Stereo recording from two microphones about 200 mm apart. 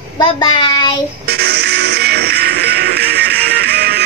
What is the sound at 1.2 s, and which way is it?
Music, 55° right (ahead or behind).